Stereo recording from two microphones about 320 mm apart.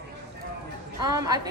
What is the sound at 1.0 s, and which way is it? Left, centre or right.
Speech, centre.